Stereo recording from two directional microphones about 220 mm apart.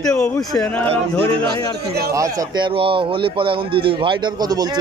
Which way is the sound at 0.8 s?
25° right (ahead or behind).